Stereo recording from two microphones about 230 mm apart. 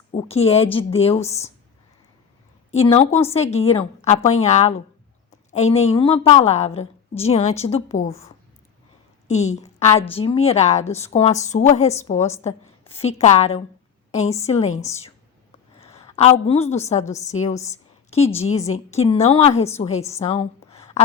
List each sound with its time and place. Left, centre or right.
0.1 s a woman's voice: left
2.7 s a woman's voice: left
9.2 s a woman's voice: left
15.8 s a sound: left
16.1 s a woman's voice: left
20.1 s a sound: left